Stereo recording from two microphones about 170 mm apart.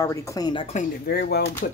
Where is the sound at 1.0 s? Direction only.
70° left (ahead or behind).